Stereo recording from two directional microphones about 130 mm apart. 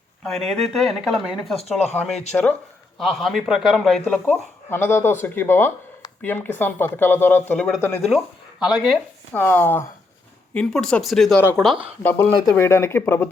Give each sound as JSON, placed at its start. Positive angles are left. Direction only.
{"t": 0.2, "sound": "speech", "side_deg": 0}
{"t": 2.0, "sound": "speech", "side_deg": 10}
{"t": 3.0, "sound": "speech", "side_deg": 0}
{"t": 4.0, "sound": "speech", "side_deg": 15}
{"t": 7.8, "sound": "speech", "side_deg": 20}
{"t": 8.0, "sound": "speech", "side_deg": -5}
{"t": 9.3, "sound": "speech", "side_deg": 15}
{"t": 10.5, "sound": "speech", "side_deg": 5}
{"t": 12.0, "sound": "speech", "side_deg": 15}